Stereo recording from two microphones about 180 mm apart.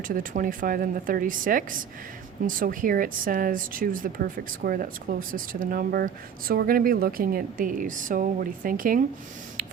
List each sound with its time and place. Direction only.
0.1 s speech: 50° right (ahead or behind)